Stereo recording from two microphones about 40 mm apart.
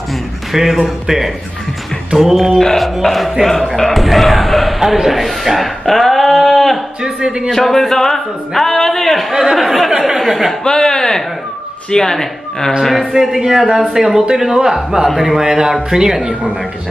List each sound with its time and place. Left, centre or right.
0.5 s speech: centre
7.0 s speech: centre
7.4 s speech: centre
9.3 s speech: centre
10.6 s speech: centre
13.1 s speech: centre